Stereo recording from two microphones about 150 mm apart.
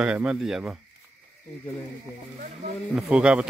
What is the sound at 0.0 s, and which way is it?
Speech, 5° right (ahead or behind).